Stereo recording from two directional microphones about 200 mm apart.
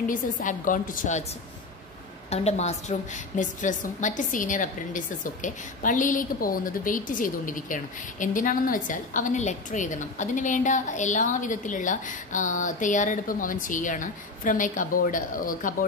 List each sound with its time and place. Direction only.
0.1 s a woman's voice: 40° left (ahead or behind)
2.2 s a woman's voice: 30° left (ahead or behind)